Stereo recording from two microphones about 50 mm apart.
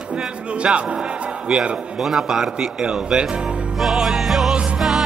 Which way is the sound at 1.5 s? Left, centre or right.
Centre.